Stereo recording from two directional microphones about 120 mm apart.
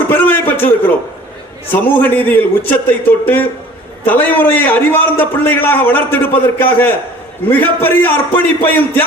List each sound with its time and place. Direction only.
0.1 s a man's voice: 15° left (ahead or behind)